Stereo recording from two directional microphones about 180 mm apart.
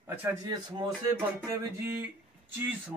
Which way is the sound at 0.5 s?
25° right (ahead or behind).